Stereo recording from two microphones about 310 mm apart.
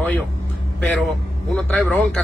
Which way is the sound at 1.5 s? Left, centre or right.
Centre.